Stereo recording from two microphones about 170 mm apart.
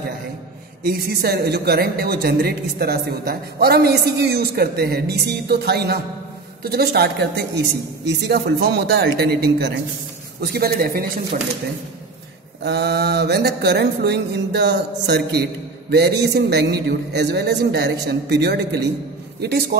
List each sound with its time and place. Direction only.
0.8 s a woman's voice: 65° right (ahead or behind)
12.6 s a woman's voice: 75° right (ahead or behind)
19.4 s a woman's voice: 70° right (ahead or behind)